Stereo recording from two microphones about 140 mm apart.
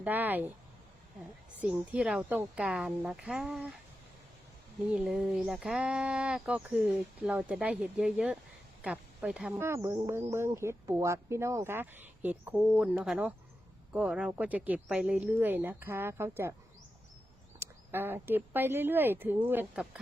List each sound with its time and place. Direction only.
0.0 s speech: 15° right (ahead or behind)
1.6 s speech: 10° right (ahead or behind)
4.9 s speech: 5° right (ahead or behind)
17.6 s speech: 15° right (ahead or behind)